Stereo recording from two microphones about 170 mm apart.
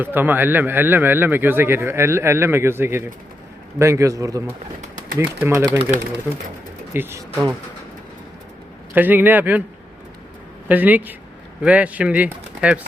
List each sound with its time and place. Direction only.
0.0 s speech: 10° right (ahead or behind)
6.9 s speech: 15° right (ahead or behind)
9.0 s speech: 10° right (ahead or behind)
10.7 s speech: 10° right (ahead or behind)